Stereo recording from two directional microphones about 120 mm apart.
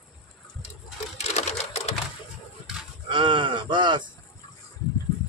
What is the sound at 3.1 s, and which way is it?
A man's voice, 45° right (ahead or behind).